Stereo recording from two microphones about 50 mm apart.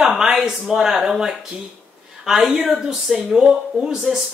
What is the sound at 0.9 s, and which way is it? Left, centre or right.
Speech, centre.